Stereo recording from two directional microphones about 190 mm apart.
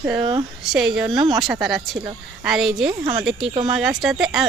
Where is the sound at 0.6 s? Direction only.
Centre (ahead or behind).